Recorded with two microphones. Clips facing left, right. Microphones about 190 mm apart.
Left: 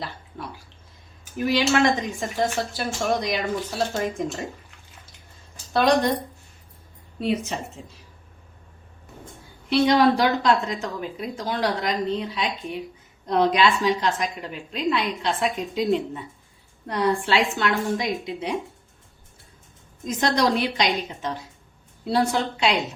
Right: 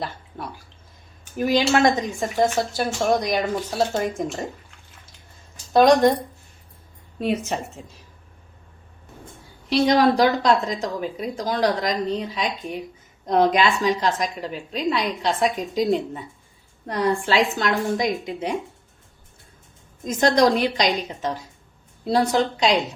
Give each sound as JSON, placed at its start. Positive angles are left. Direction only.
{"t": 1.4, "sound": "a woman's voice", "side_deg": -45}
{"t": 5.7, "sound": "a woman's voice", "side_deg": -45}
{"t": 7.2, "sound": "a woman's voice", "side_deg": -50}
{"t": 9.6, "sound": "a woman's voice", "side_deg": -40}
{"t": 20.1, "sound": "a woman's voice", "side_deg": -45}